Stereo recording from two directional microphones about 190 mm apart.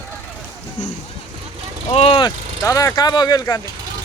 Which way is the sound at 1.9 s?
30° left (ahead or behind).